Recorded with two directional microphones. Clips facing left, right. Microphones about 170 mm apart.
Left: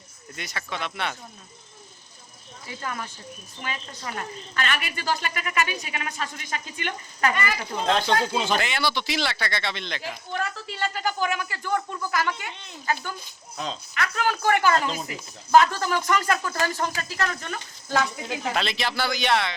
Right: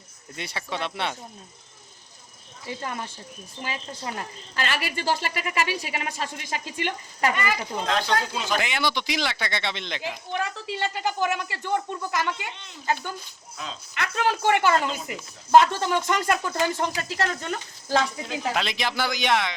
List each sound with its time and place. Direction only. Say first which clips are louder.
0.3 s speech: right 2 dB; 30° right (ahead or behind)
2.6 s speech: right 1 dB; 25° right (ahead or behind)
7.9 s speech: left 3 dB; 25° left (ahead or behind)
8.5 s speech: even; 15° right (ahead or behind); by 18.5 s 30° right (ahead or behind)
18.5 s speech: left 1 dB; 15° right (ahead or behind)